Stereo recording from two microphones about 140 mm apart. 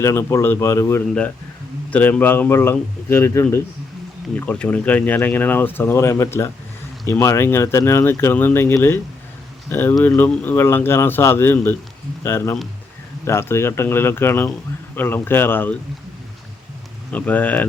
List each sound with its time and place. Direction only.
0.0 s speech: 20° left (ahead or behind)
17.1 s speech: 10° left (ahead or behind)